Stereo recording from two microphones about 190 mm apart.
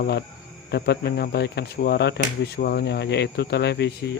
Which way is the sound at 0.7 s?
60° left (ahead or behind).